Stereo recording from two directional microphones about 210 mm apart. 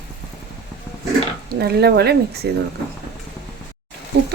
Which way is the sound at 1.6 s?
50° right (ahead or behind).